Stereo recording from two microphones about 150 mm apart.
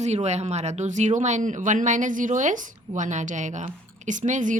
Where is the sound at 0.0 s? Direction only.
50° right (ahead or behind).